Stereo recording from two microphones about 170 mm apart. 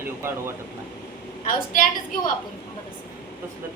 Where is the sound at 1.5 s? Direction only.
55° left (ahead or behind).